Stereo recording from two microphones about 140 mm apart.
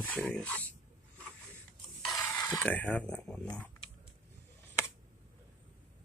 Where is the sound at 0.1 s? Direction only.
10° left (ahead or behind).